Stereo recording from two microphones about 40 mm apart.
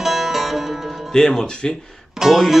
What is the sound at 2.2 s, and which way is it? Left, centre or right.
Speech, centre.